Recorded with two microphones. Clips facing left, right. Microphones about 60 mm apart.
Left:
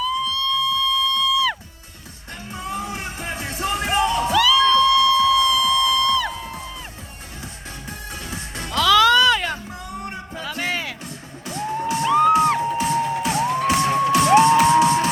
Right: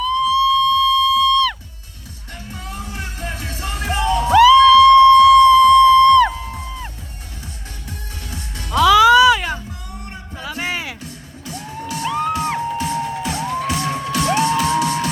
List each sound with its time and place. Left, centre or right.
0.0 s music: centre
0.3 s music: centre
0.5 s music: centre
2.5 s music: left
4.3 s a sound: right
4.9 s siren: right
5.4 s music: right
7.4 s music: left
8.7 s music: centre
9.6 s music: left
10.5 s music: centre
11.0 s music: left
12.0 s music: centre
12.5 s music: left